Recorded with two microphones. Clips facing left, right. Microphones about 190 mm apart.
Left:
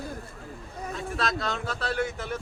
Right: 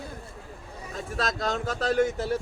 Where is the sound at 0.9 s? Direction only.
45° right (ahead or behind).